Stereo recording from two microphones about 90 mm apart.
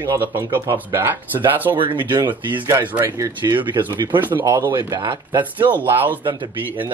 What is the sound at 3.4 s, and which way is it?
Speech, 60° right (ahead or behind).